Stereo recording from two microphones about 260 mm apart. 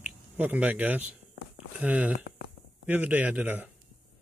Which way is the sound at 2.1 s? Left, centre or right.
Left.